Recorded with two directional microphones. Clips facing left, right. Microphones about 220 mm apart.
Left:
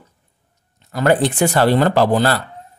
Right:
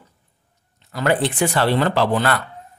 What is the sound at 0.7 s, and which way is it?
Speech, 45° left (ahead or behind).